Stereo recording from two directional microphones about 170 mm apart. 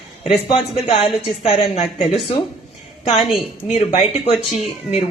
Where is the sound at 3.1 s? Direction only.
Centre (ahead or behind).